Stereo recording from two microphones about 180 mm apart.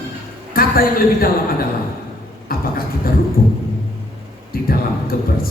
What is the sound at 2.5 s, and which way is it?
Speech, 55° left (ahead or behind).